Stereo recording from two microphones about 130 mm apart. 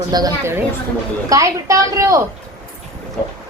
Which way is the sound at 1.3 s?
25° right (ahead or behind).